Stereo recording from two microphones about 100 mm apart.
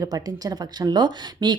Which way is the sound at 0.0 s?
40° right (ahead or behind).